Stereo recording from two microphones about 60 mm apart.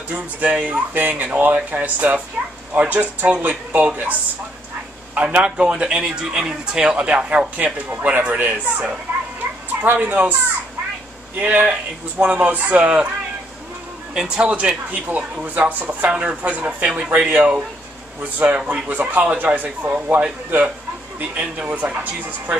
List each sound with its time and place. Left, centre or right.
0.1 s speech: centre
5.1 s a man's voice: right
11.3 s speech: right
14.1 s speech: centre
18.6 s speech: right
21.2 s speech: right